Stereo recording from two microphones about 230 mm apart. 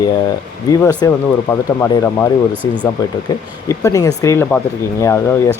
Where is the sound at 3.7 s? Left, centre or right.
Centre.